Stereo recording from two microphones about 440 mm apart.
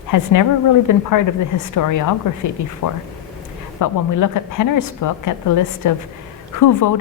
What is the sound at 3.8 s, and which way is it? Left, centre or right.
A woman's voice, left.